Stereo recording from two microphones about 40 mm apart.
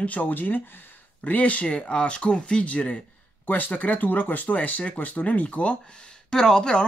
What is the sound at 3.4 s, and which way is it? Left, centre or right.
Speech, left.